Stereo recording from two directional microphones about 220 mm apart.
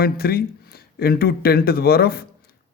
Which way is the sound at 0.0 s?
45° left (ahead or behind).